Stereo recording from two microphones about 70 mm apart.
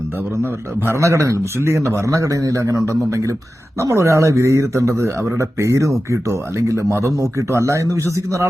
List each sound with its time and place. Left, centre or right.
0.9 s a man's voice: right